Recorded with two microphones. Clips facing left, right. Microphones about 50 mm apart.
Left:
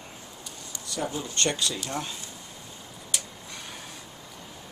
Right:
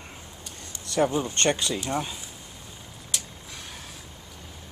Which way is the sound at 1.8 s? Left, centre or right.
Centre.